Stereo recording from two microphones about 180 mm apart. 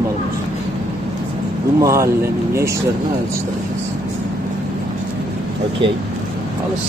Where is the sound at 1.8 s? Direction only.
15° right (ahead or behind).